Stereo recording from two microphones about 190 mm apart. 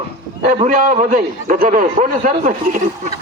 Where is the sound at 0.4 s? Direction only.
40° right (ahead or behind).